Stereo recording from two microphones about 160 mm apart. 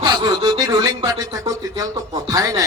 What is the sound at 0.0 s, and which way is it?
A man's voice, 25° right (ahead or behind).